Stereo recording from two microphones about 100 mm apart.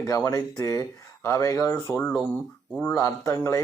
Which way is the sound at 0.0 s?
35° left (ahead or behind).